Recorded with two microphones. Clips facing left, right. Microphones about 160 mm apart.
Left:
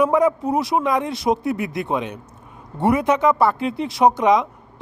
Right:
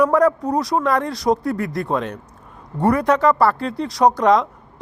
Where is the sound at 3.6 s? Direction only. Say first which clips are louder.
Even; 20° left (ahead or behind).